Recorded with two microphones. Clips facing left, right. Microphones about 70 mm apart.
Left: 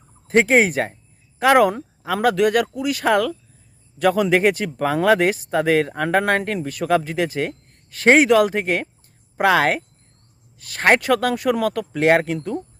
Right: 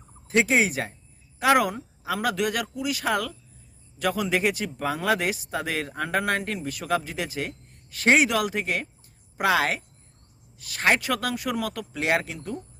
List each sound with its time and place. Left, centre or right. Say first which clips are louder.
0.3 s speech: left 6 dB; left